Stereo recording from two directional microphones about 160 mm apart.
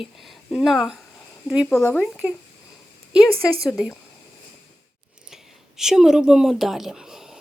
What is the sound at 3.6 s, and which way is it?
Speech, centre (ahead or behind).